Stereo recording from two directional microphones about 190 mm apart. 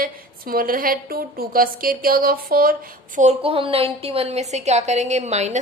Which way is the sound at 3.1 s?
35° right (ahead or behind).